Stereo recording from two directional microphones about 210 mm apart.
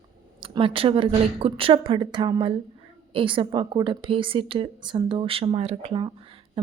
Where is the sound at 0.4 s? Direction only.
25° right (ahead or behind).